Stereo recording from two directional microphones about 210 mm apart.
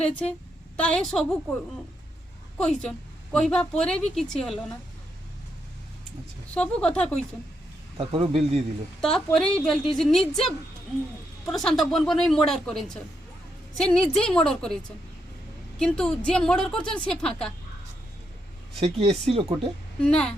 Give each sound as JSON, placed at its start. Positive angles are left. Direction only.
{"t": 0.8, "sound": "speech", "side_deg": 5}
{"t": 2.6, "sound": "speech", "side_deg": 5}
{"t": 6.5, "sound": "speech", "side_deg": 5}
{"t": 7.9, "sound": "speech", "side_deg": -25}
{"t": 9.0, "sound": "speech", "side_deg": 0}
{"t": 15.8, "sound": "speech", "side_deg": 5}
{"t": 18.8, "sound": "speech", "side_deg": -30}
{"t": 20.1, "sound": "speech", "side_deg": 5}